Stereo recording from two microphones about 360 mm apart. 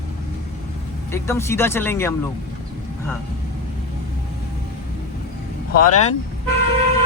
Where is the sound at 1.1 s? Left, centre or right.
Centre.